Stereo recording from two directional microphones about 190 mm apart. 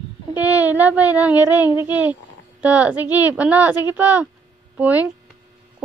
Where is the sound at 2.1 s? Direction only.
10° right (ahead or behind).